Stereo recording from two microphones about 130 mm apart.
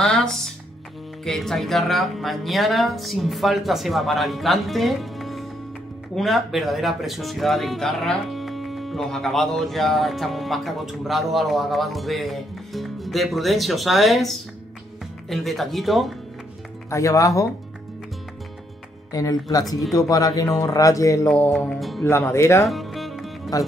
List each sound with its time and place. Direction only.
0.0 s music: 5° left (ahead or behind)
1.2 s speech: 5° left (ahead or behind)
16.9 s speech: 25° left (ahead or behind)
19.1 s speech: 25° left (ahead or behind)
21.3 s music: 15° left (ahead or behind)
21.5 s speech: centre (ahead or behind)
22.0 s speech: 20° left (ahead or behind)
22.7 s music: centre (ahead or behind)